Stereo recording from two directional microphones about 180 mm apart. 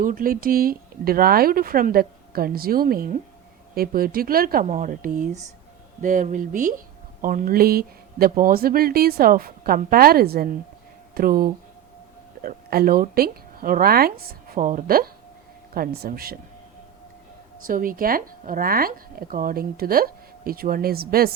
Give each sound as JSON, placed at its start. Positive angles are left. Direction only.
{"t": 0.0, "sound": "a woman's voice", "side_deg": -50}
{"t": 17.7, "sound": "a woman's voice", "side_deg": -50}